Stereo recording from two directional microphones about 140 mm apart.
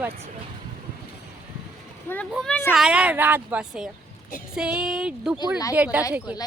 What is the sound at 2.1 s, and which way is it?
Speech, 15° left (ahead or behind).